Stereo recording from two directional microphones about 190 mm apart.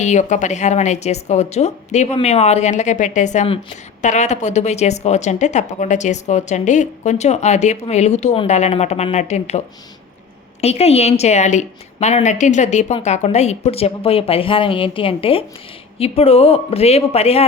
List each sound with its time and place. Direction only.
0.0 s a woman's voice: 40° left (ahead or behind)
10.6 s a woman's voice: 35° left (ahead or behind)